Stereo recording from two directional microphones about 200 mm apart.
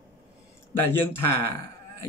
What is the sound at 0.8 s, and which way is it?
Speech, 10° left (ahead or behind).